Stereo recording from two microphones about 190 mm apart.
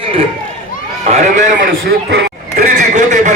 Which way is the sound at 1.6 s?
90° right.